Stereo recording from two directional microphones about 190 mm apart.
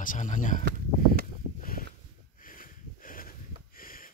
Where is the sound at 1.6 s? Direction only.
50° left (ahead or behind).